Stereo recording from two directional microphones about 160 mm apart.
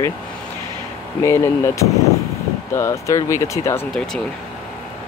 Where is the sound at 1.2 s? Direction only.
15° left (ahead or behind).